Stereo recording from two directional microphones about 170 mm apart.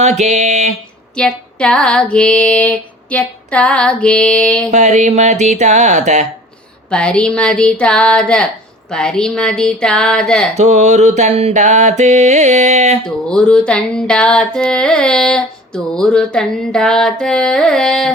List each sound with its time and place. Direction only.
0.0 s mantra: 45° right (ahead or behind)
1.1 s female singing: 5° left (ahead or behind)
4.7 s mantra: 45° right (ahead or behind)
6.9 s a sound: 5° left (ahead or behind)
10.5 s mantra: 45° right (ahead or behind)
13.0 s a sound: 5° left (ahead or behind)